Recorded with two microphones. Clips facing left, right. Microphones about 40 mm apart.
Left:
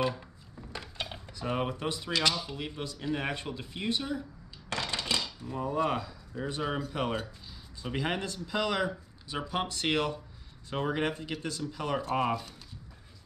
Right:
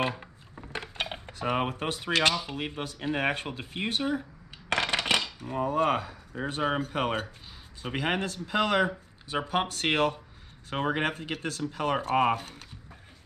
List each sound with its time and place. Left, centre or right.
0.0 s a sound: right
2.4 s speech: right
4.6 s cutlery: right
7.8 s speech: right